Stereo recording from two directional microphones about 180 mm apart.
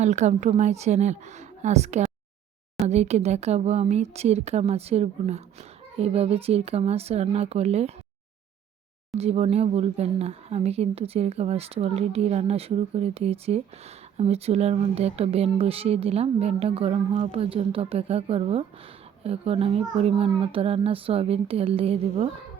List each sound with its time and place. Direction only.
0.0 s speech: 40° right (ahead or behind)
9.1 s speech: 35° right (ahead or behind)